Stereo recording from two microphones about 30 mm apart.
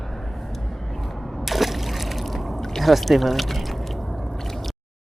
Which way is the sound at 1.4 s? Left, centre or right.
Centre.